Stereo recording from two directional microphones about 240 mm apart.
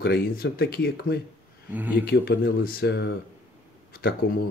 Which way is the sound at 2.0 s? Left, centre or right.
Left.